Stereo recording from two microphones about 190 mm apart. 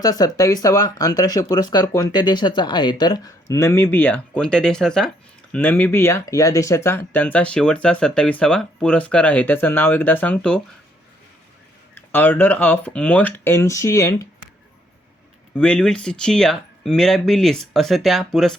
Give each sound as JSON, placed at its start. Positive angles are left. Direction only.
{"t": 0.0, "sound": "speech", "side_deg": 20}
{"t": 11.9, "sound": "speech", "side_deg": 10}
{"t": 15.5, "sound": "speech", "side_deg": 5}